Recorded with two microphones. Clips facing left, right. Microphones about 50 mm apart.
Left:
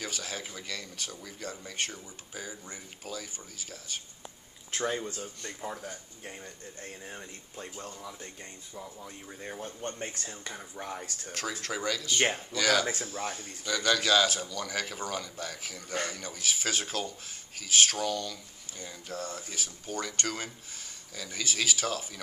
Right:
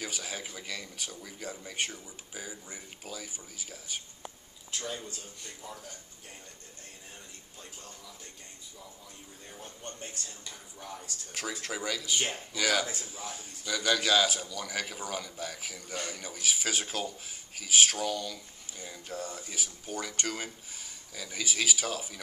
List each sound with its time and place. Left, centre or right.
0.0 s speech: centre
4.6 s speech: left
6.8 s speech: left
9.6 s speech: left
9.9 s speech: left
11.6 s speech: centre
13.0 s speech: left
13.4 s speech: centre